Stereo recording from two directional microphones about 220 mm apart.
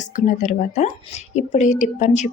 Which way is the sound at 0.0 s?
35° left (ahead or behind).